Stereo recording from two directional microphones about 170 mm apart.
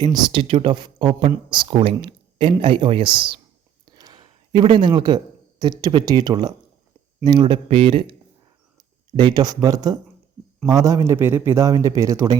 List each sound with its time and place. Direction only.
0.0 s a man's voice: 25° right (ahead or behind)